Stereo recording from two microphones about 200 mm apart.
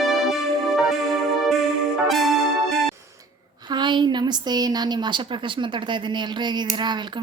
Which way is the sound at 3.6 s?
20° right (ahead or behind).